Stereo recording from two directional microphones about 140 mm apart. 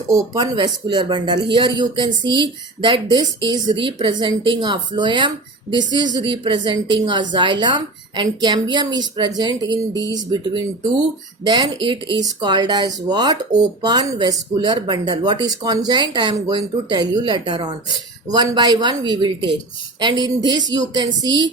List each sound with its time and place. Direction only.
0.1 s a woman's voice: 25° right (ahead or behind)